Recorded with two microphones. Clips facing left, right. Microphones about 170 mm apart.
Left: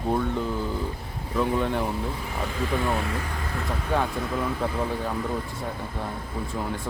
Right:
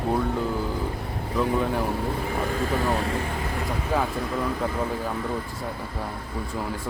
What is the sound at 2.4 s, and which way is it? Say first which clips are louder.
Speech: even; 40° right (ahead or behind).